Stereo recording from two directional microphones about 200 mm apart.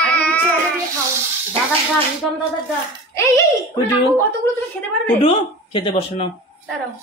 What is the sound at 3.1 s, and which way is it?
Speech, 15° left (ahead or behind).